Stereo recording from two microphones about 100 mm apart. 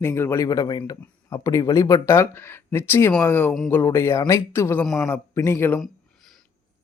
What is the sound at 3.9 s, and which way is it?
Speech, 30° left (ahead or behind).